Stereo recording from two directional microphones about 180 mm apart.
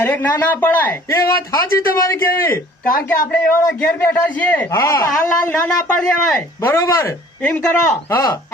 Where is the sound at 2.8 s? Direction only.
50° left (ahead or behind).